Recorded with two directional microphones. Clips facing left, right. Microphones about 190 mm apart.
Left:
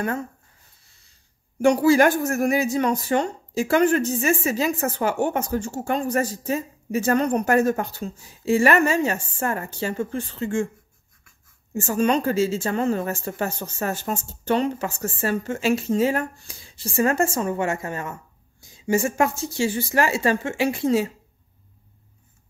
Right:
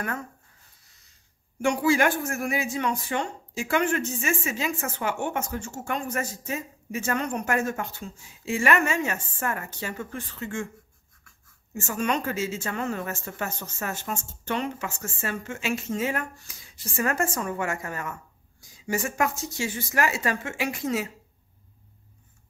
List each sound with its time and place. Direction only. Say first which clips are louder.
1.6 s a woman's voice: left 6 dB; 40° left (ahead or behind)
11.7 s a woman's voice: left 7 dB; 35° left (ahead or behind)